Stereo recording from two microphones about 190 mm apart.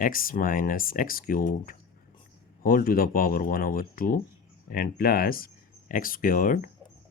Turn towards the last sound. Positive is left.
turn(degrees=45)  # may be behind; listen again after turning